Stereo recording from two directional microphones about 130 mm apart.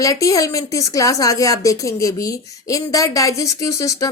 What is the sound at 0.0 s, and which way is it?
A woman's voice, 25° left (ahead or behind).